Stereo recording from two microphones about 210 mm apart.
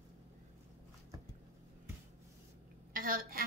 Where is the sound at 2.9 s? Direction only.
45° right (ahead or behind).